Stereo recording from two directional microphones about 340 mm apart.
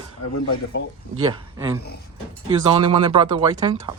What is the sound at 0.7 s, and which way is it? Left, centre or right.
Speech, left.